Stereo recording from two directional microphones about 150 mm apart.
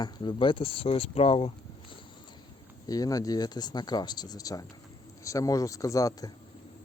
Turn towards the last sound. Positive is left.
turn(degrees=25)  # may be behind; listen again after turning